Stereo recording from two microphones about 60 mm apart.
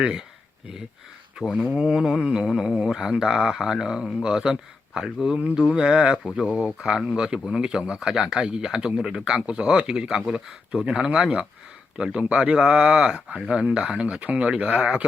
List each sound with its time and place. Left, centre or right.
0.0 s speech: centre
1.4 s speech: centre